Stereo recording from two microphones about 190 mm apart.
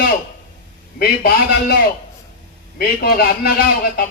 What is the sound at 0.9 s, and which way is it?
A man's voice, 55° left (ahead or behind).